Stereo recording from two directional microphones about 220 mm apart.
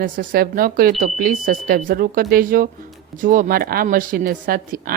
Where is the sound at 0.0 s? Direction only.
40° right (ahead or behind).